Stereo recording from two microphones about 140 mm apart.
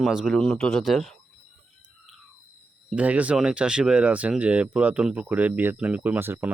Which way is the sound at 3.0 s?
10° right (ahead or behind).